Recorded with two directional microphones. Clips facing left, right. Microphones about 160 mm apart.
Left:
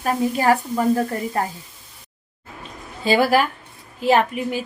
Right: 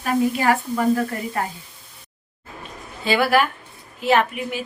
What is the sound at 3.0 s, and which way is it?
A woman's voice, 40° left (ahead or behind).